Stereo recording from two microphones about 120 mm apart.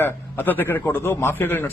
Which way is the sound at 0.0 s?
15° left (ahead or behind).